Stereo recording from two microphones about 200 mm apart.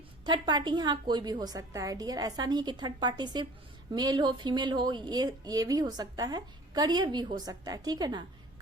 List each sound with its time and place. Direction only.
0.3 s a woman's voice: 20° right (ahead or behind)